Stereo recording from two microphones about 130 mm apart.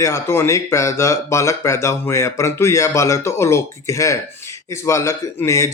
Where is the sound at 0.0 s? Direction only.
20° left (ahead or behind).